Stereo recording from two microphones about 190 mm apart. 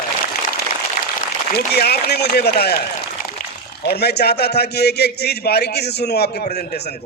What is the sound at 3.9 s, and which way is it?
A man's voice, 60° left (ahead or behind).